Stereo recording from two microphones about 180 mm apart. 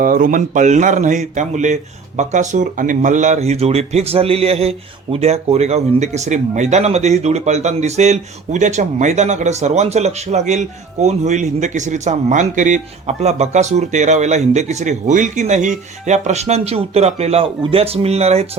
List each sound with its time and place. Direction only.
0.0 s speech: 50° right (ahead or behind)